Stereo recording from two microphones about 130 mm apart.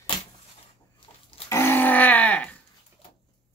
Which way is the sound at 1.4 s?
20° left (ahead or behind).